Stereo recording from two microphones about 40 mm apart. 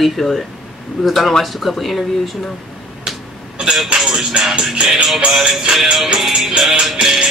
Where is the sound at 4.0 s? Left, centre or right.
Centre.